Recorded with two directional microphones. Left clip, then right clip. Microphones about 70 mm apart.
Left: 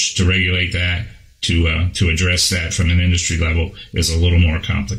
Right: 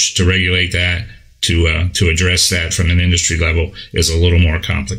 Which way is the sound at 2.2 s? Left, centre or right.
Right.